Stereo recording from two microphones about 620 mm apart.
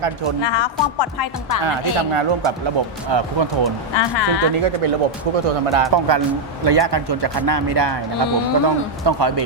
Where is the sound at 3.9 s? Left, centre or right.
Left.